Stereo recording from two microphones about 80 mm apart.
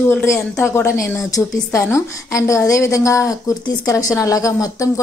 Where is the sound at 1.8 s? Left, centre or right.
Left.